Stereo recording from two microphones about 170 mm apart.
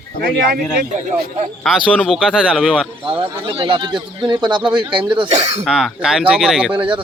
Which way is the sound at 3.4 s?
30° right (ahead or behind).